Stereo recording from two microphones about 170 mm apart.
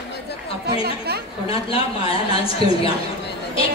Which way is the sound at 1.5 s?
35° left (ahead or behind).